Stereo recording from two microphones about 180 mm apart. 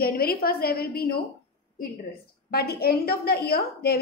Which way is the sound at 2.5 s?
60° left (ahead or behind).